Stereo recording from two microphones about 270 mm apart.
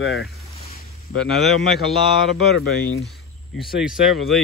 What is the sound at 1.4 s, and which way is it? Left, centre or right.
Speech, centre.